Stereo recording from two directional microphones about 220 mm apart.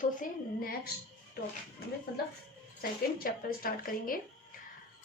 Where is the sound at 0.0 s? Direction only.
40° left (ahead or behind).